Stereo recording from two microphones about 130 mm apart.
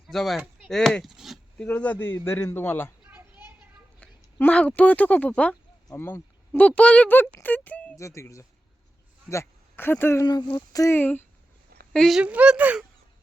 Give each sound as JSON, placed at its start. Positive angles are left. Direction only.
{"t": 0.1, "sound": "speech", "side_deg": 0}
{"t": 1.5, "sound": "a man's voice", "side_deg": 10}
{"t": 3.1, "sound": "children playing", "side_deg": -15}
{"t": 4.0, "sound": "speech", "side_deg": 10}
{"t": 5.9, "sound": "speech", "side_deg": 20}
{"t": 7.9, "sound": "speech", "side_deg": 25}
{"t": 10.2, "sound": "speech", "side_deg": 30}
{"t": 10.9, "sound": "a man's voice", "side_deg": 15}
{"t": 11.9, "sound": "speech", "side_deg": 0}
{"t": 12.2, "sound": "speech", "side_deg": -10}